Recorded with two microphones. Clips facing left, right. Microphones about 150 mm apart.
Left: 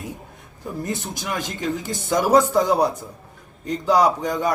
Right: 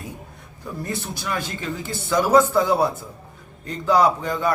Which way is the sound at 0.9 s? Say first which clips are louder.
Right 1 dB; 15° left (ahead or behind).